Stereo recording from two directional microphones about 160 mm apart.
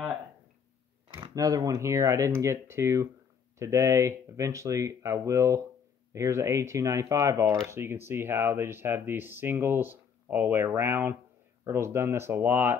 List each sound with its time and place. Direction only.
1.1 s speech: 25° right (ahead or behind)